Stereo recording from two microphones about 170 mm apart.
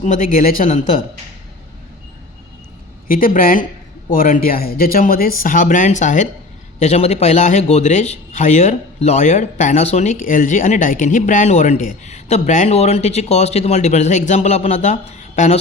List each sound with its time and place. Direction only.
0.0 s speech: 50° left (ahead or behind)
3.1 s speech: 55° left (ahead or behind)